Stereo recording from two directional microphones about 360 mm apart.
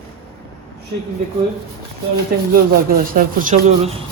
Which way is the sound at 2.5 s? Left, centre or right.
Right.